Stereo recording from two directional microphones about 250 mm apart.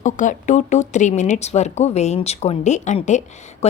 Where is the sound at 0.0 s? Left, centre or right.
Left.